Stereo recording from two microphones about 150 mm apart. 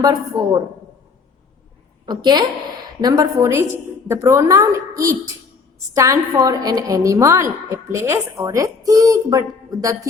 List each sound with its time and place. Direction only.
0.0 s a woman's voice: 25° right (ahead or behind)
2.0 s a woman's voice: 30° right (ahead or behind)